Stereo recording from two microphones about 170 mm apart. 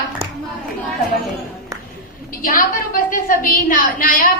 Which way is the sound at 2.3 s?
55° left (ahead or behind).